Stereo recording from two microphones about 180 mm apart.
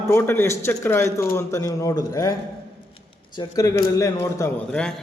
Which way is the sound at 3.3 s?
20° left (ahead or behind).